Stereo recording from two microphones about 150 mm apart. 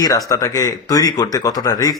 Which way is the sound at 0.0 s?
25° left (ahead or behind).